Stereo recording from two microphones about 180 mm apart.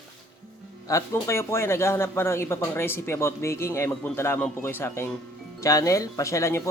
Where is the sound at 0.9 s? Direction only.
15° left (ahead or behind).